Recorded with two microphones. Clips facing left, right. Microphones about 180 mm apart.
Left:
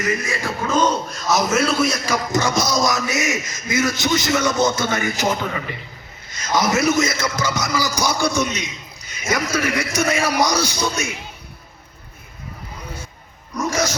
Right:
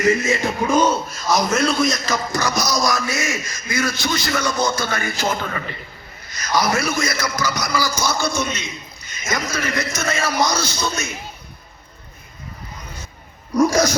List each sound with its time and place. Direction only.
0.0 s speech: 25° right (ahead or behind); by 2.4 s 10° left (ahead or behind)
2.4 s a man's voice: 25° left (ahead or behind)